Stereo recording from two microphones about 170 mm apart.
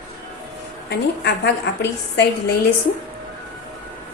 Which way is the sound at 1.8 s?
75° left (ahead or behind).